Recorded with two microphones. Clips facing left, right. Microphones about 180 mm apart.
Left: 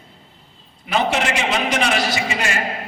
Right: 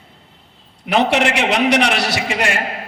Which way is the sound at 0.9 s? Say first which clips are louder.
Right 4 dB; 65° right (ahead or behind).